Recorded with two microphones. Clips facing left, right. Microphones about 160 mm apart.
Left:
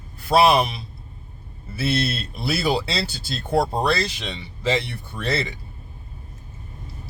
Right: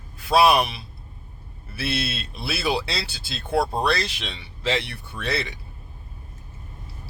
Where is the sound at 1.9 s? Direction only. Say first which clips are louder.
Left 5 dB; 5° right (ahead or behind).